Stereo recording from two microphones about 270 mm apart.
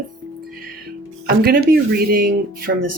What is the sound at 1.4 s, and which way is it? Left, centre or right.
Speech, right.